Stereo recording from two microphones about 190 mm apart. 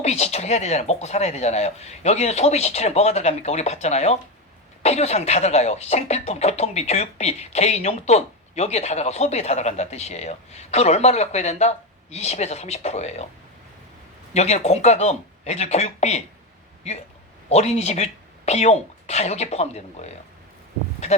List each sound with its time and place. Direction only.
0.0 s speech: 35° left (ahead or behind)
14.3 s speech: 35° left (ahead or behind)
17.5 s speech: 35° left (ahead or behind)